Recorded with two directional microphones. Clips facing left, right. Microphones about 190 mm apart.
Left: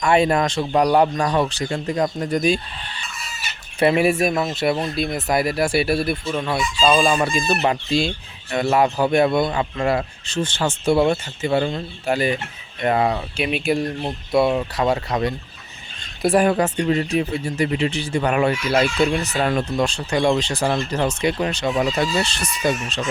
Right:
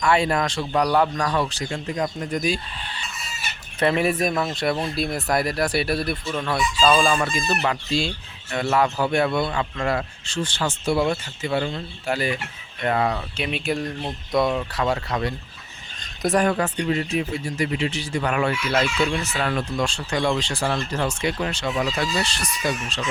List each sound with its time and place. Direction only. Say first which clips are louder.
0.0 s speech: left 4 dB; 25° left (ahead or behind); by 2.5 s 40° left (ahead or behind)
3.8 s speech: left 4 dB; 10° left (ahead or behind)
5.9 s speech: left 4 dB; 25° left (ahead or behind)
6.2 s speech: left 2 dB; 15° left (ahead or behind)
6.9 s speech: left 2 dB; 20° left (ahead or behind)
14.6 s speech: left 3 dB; 20° left (ahead or behind)
16.4 s speech: left 3 dB; 15° left (ahead or behind)
16.7 s speech: left 4 dB; 35° left (ahead or behind)
18.9 s speech: left 4 dB; 35° left (ahead or behind)
19.5 s speech: left 4 dB; 20° left (ahead or behind)